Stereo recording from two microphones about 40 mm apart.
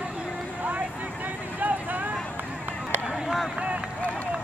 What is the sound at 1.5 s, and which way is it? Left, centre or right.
Vehicle, right.